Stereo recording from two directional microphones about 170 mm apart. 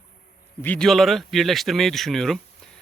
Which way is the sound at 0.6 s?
5° left (ahead or behind).